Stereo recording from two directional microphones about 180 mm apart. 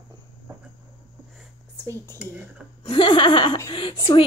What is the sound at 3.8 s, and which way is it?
Speech, 25° left (ahead or behind).